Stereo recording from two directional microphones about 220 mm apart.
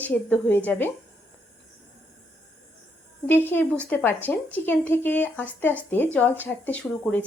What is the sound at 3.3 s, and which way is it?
Speech, 10° left (ahead or behind).